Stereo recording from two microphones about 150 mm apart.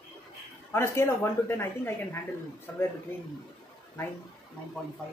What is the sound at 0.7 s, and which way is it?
Speech, 15° left (ahead or behind).